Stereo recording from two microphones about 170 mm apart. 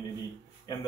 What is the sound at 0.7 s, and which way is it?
Speech, 25° left (ahead or behind).